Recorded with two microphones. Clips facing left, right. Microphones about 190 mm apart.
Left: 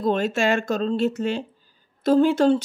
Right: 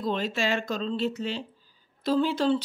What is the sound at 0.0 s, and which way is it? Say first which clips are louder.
Speech: left 6 dB; 50° left (ahead or behind).